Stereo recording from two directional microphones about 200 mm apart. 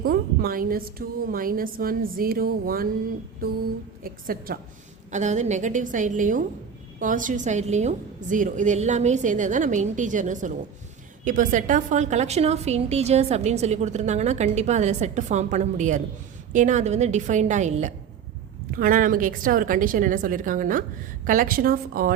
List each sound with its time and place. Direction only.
0.0 s a woman's voice: 45° right (ahead or behind)
5.1 s a woman's voice: 35° right (ahead or behind)